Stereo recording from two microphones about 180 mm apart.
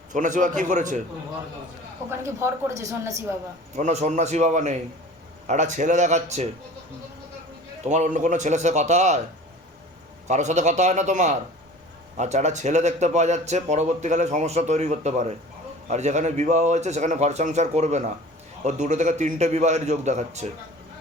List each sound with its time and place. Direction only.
0.1 s a man's voice: 45° right (ahead or behind)
2.0 s a woman's voice: 15° right (ahead or behind)
3.8 s speech: 40° right (ahead or behind)
7.9 s speech: 40° right (ahead or behind)
10.2 s speech: 40° right (ahead or behind)